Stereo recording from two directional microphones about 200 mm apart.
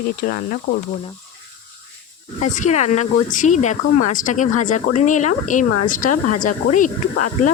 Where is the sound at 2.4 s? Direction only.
35° left (ahead or behind).